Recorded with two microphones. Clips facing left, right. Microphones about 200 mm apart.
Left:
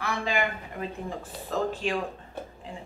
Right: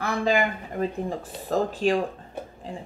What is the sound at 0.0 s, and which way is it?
Speech, 40° right (ahead or behind).